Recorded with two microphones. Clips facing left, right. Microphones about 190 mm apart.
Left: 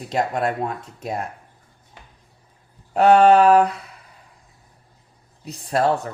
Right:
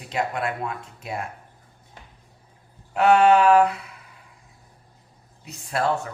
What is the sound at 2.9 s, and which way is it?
Speech, 35° left (ahead or behind).